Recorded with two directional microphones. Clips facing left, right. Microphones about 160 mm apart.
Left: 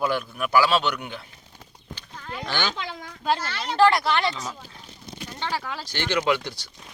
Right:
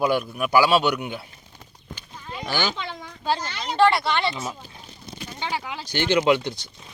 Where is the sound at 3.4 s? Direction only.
15° right (ahead or behind).